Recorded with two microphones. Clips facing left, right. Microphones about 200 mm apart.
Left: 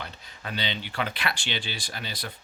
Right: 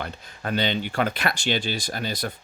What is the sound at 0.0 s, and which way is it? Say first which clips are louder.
Speech: right 7 dB; 50° right (ahead or behind).